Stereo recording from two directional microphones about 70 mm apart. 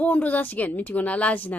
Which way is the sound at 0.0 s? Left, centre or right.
Left.